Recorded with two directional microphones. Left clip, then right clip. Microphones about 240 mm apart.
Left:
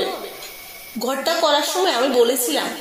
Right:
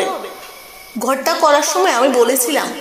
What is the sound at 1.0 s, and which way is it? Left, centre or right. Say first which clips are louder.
A woman's voice: right 5 dB; right.